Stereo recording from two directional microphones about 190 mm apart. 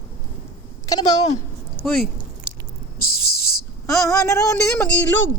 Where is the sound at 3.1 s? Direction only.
55° left (ahead or behind).